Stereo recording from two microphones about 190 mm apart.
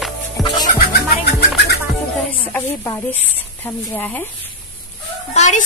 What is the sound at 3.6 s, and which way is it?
Music, 10° left (ahead or behind).